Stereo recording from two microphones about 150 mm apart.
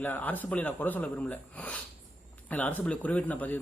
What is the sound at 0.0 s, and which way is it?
Speech, 10° left (ahead or behind).